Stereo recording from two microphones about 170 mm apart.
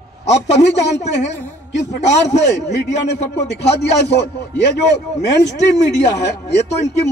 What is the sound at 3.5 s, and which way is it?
Speech, 90° left.